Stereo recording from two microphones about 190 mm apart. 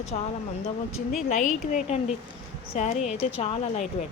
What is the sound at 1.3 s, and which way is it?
Speech, 40° left (ahead or behind).